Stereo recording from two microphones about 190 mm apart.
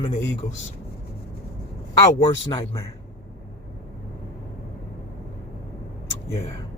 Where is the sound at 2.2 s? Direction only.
25° left (ahead or behind).